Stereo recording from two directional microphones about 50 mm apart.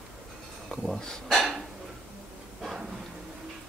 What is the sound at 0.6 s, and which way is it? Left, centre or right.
Speech, centre.